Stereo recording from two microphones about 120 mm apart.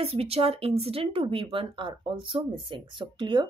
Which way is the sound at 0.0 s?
55° right (ahead or behind).